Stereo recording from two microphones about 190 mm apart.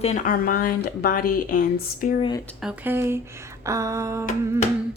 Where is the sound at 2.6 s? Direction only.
10° right (ahead or behind).